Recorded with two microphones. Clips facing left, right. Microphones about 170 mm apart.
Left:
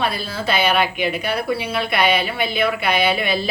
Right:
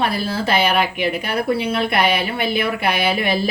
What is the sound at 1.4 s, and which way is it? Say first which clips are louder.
Speech: right 3 dB; 55° right (ahead or behind).